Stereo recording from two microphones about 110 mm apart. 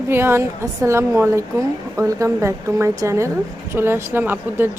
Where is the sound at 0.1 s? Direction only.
20° right (ahead or behind).